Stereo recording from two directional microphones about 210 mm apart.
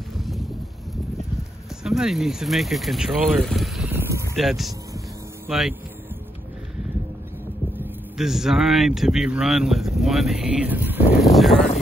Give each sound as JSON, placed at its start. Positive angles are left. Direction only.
{"t": 0.2, "sound": "a sound", "side_deg": 0}
{"t": 1.8, "sound": "speech", "side_deg": 0}
{"t": 3.9, "sound": "a sound", "side_deg": -15}
{"t": 4.4, "sound": "speech", "side_deg": 0}
{"t": 7.8, "sound": "speech", "side_deg": 0}
{"t": 11.5, "sound": "speech", "side_deg": 30}